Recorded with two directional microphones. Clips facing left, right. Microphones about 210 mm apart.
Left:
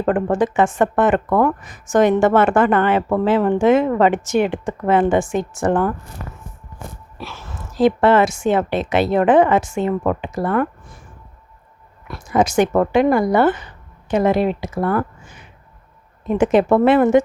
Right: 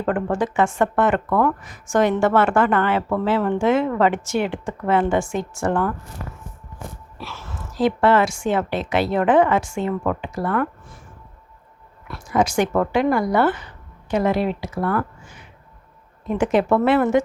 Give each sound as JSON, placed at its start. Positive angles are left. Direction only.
{"t": 0.1, "sound": "speech", "side_deg": 20}
{"t": 7.2, "sound": "speech", "side_deg": 15}
{"t": 12.0, "sound": "a woman's voice", "side_deg": 20}